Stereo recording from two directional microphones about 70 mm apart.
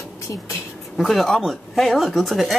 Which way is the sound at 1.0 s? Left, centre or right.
Centre.